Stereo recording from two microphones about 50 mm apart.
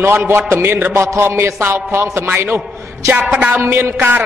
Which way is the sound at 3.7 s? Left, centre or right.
Right.